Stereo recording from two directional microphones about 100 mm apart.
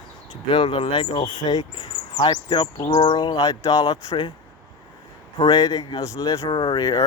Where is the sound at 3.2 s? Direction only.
40° left (ahead or behind).